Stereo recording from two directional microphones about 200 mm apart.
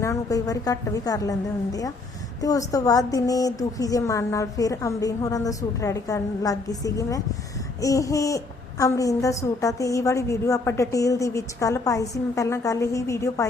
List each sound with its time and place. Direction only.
0.0 s a woman's voice: 15° left (ahead or behind)